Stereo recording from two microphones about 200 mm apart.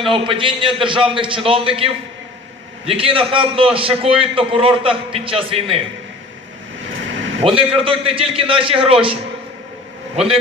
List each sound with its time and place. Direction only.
0.0 s a man's voice: 25° right (ahead or behind)
2.9 s a man's voice: 30° right (ahead or behind)
7.3 s a man's voice: 25° right (ahead or behind)